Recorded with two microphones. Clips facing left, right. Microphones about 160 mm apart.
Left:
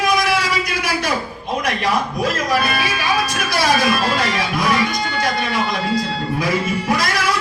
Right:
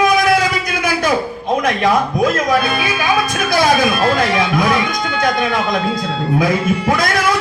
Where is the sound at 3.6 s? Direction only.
55° right (ahead or behind).